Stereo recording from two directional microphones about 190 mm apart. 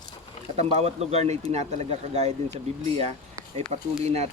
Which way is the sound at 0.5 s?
35° right (ahead or behind).